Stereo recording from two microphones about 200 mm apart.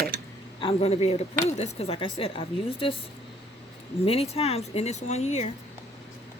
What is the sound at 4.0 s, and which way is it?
A woman's voice, 30° left (ahead or behind).